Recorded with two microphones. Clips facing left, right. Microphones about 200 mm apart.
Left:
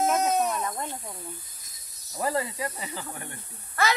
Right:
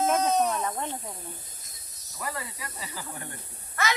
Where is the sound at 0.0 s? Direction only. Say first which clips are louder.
Even; 10° left (ahead or behind).